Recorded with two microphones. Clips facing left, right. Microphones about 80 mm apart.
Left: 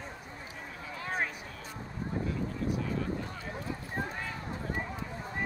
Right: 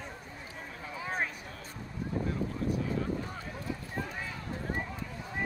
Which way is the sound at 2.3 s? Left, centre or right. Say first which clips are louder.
Right 1 dB; right.